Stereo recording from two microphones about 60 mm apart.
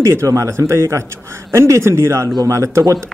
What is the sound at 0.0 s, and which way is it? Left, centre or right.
A man's voice, right.